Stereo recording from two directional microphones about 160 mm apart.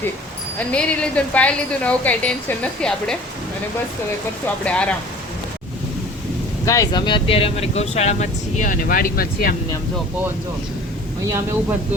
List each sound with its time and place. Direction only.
0.7 s a woman's voice: 5° left (ahead or behind)
4.6 s a woman's voice: 5° left (ahead or behind)
6.7 s speech: 25° left (ahead or behind); by 9.6 s 65° left (ahead or behind)